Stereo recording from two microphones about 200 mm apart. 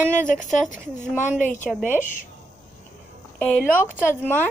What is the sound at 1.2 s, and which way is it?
Speech, 40° left (ahead or behind).